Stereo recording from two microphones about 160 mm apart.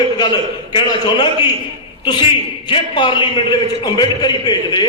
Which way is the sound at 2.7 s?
30° left (ahead or behind).